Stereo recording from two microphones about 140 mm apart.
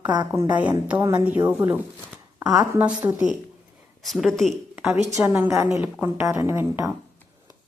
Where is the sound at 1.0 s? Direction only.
30° right (ahead or behind).